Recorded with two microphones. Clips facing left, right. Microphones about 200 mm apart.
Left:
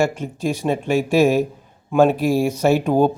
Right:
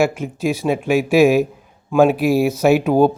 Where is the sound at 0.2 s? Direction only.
10° right (ahead or behind).